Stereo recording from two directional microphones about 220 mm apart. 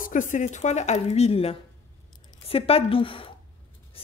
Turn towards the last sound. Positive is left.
turn(degrees=25)  # may be behind; listen again after turning